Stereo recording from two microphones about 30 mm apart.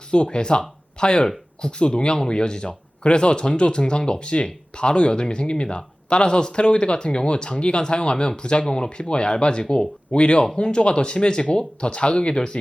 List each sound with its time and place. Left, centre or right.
0.1 s speech: left